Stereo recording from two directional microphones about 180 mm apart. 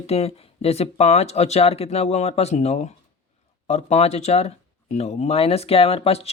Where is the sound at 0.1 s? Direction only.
35° left (ahead or behind).